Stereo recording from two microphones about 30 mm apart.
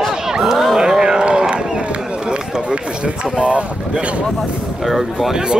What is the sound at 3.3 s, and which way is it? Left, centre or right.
Speech, right.